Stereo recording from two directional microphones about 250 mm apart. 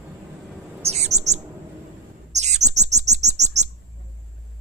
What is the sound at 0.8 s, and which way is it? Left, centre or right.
Bird, right.